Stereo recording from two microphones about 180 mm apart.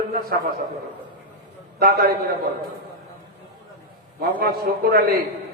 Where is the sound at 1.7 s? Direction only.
55° right (ahead or behind).